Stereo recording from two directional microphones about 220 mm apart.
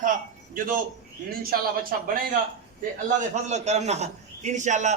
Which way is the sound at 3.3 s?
30° right (ahead or behind).